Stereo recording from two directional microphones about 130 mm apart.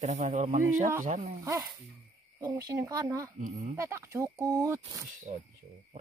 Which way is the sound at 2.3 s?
25° right (ahead or behind).